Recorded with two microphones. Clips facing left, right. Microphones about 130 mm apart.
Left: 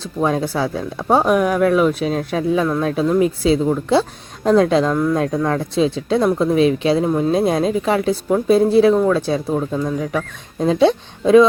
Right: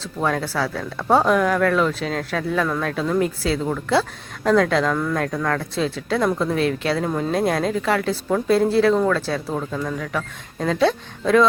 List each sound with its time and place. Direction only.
0.0 s speech: 20° left (ahead or behind)